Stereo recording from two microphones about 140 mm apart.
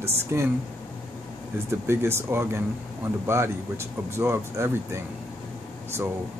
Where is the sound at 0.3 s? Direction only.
20° right (ahead or behind).